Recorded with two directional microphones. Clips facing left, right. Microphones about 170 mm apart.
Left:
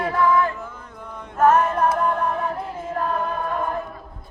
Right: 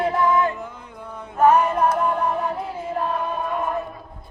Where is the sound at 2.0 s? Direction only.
5° right (ahead or behind).